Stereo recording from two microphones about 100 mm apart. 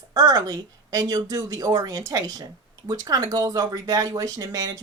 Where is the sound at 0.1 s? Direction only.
40° right (ahead or behind).